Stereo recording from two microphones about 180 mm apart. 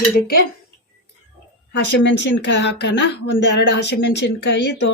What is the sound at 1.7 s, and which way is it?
Speech, 80° left.